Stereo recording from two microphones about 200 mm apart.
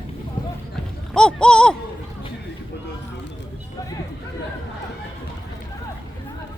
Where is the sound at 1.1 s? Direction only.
5° left (ahead or behind).